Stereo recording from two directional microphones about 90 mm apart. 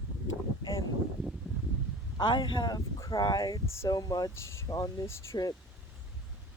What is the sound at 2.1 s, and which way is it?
Speech, 55° left (ahead or behind).